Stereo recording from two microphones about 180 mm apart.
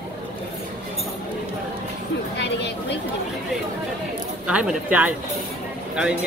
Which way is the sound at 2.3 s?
70° left (ahead or behind).